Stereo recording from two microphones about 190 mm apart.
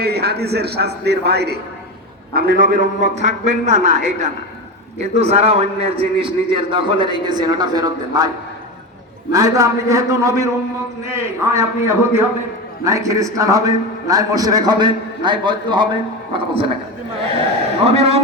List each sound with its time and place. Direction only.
0.0 s a man's voice: 60° right (ahead or behind); by 8.3 s 20° right (ahead or behind)
9.3 s a man's voice: 15° right (ahead or behind)
17.8 s a man's voice: 30° right (ahead or behind)